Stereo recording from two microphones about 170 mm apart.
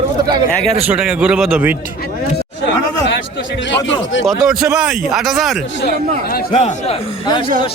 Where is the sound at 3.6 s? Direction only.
90° left.